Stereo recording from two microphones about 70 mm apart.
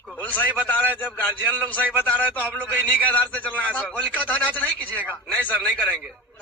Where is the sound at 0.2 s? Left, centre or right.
Left.